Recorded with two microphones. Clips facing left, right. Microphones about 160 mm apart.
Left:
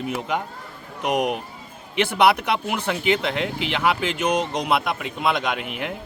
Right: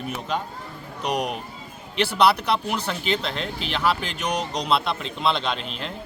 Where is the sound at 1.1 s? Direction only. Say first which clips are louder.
Left 4 dB; 20° left (ahead or behind).